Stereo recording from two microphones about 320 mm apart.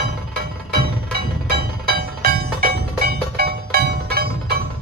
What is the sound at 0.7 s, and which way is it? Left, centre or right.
Music, right.